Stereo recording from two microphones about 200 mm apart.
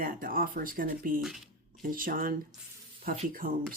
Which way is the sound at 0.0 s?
45° right (ahead or behind).